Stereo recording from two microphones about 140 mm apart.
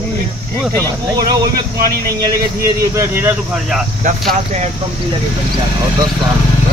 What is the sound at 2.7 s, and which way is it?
Speech, 20° right (ahead or behind).